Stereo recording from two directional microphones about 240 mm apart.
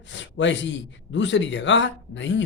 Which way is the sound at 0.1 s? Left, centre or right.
Left.